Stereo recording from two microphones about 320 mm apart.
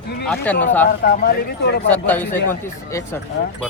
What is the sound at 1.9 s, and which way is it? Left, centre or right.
A man's voice, centre.